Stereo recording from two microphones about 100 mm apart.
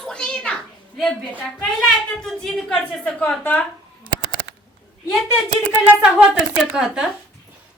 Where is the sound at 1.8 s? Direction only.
Centre (ahead or behind).